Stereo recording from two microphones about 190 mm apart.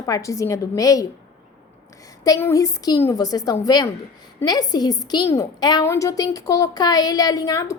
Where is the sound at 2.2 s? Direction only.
15° left (ahead or behind).